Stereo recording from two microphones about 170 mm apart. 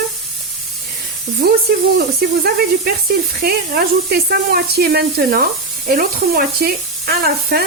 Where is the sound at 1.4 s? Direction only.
65° right (ahead or behind).